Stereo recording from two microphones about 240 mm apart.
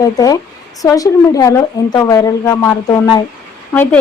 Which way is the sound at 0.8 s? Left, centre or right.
Centre.